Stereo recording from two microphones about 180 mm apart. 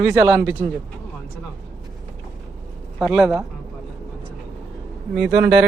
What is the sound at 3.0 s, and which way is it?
Speech, centre (ahead or behind).